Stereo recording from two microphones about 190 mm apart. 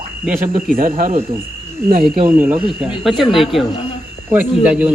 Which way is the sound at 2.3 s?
10° right (ahead or behind).